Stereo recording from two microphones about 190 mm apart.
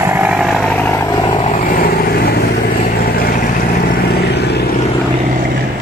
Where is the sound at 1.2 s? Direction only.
30° left (ahead or behind).